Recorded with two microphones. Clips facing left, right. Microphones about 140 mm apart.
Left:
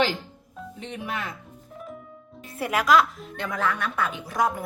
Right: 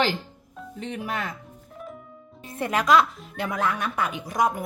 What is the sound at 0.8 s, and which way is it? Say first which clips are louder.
Speech: right 3 dB; 40° right (ahead or behind).